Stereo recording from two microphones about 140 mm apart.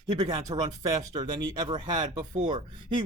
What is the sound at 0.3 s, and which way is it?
Speech, 25° right (ahead or behind).